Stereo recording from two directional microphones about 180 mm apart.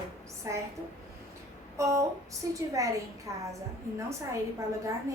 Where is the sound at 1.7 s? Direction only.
15° right (ahead or behind).